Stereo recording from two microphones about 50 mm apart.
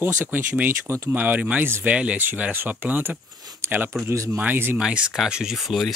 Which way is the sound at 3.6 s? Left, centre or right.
Right.